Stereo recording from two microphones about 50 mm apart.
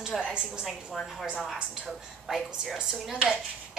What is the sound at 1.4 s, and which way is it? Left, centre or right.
A woman's voice, centre.